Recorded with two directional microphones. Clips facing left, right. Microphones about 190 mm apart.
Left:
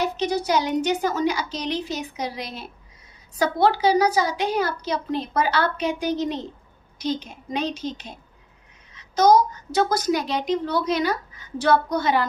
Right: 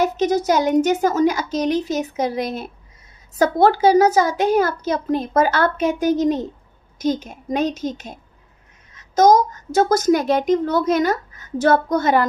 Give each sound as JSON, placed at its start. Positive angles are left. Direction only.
{"t": 0.0, "sound": "a child's voice", "side_deg": -45}